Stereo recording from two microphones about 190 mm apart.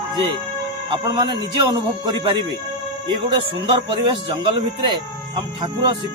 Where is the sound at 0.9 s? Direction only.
25° right (ahead or behind).